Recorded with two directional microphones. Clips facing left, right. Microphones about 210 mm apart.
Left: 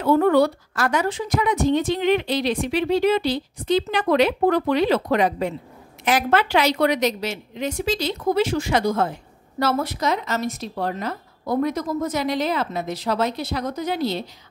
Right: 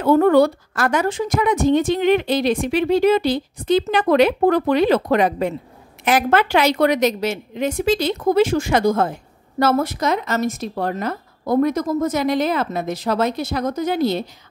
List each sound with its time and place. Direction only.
0.0 s a woman's voice: 50° right (ahead or behind)